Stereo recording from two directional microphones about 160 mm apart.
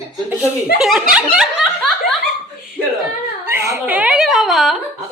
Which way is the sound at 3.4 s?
10° right (ahead or behind).